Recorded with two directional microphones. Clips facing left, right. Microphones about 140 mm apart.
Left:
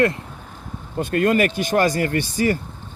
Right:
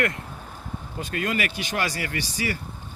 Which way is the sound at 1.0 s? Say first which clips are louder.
Left 10 dB; 50° left (ahead or behind).